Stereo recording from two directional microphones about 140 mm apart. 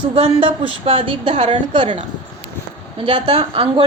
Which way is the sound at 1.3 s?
55° right (ahead or behind).